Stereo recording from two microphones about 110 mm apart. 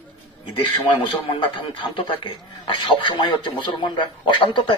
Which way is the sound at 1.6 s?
50° left (ahead or behind).